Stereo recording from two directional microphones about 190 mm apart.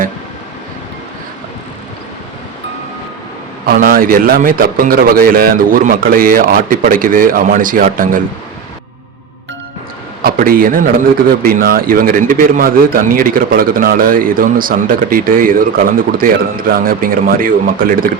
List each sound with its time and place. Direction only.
3.7 s a man's voice: 50° right (ahead or behind)
10.2 s a man's voice: 50° right (ahead or behind)